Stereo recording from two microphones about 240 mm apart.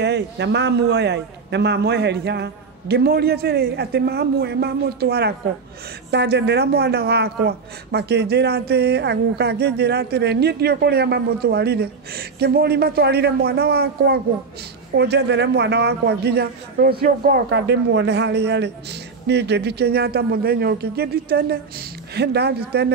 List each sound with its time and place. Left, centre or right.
0.0 s a man's voice: right